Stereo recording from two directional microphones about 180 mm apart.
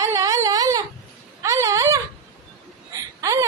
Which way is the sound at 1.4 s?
15° right (ahead or behind).